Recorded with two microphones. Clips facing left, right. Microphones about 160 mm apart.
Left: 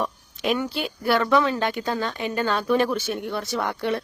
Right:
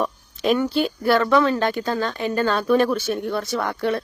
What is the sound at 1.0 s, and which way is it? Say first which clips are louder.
A woman's voice: right 2 dB; 10° left (ahead or behind).